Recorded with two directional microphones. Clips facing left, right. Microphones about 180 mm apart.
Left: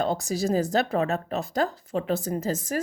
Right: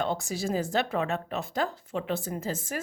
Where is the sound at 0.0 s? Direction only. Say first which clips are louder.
Left 4 dB; 40° left (ahead or behind).